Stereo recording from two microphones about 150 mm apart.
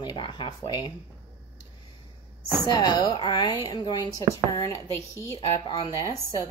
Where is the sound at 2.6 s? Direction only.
25° left (ahead or behind).